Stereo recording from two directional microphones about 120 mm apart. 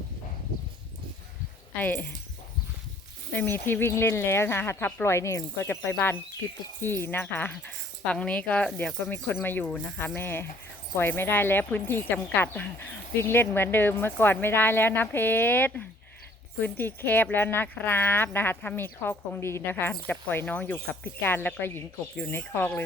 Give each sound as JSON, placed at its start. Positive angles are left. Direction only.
{"t": 1.7, "sound": "speech", "side_deg": 15}
{"t": 3.3, "sound": "speech", "side_deg": 15}
{"t": 6.8, "sound": "speech", "side_deg": 20}